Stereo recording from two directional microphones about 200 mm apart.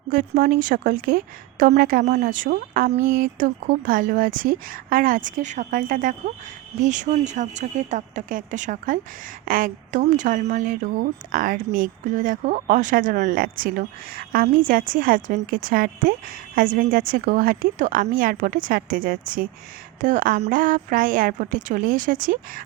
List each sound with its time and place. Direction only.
0.1 s speech: 40° right (ahead or behind)